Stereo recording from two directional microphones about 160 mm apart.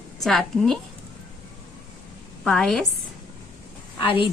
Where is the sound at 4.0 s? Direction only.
35° left (ahead or behind).